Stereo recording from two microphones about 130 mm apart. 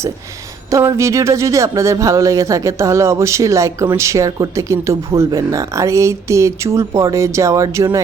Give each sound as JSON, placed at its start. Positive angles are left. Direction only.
{"t": 0.7, "sound": "speech", "side_deg": -25}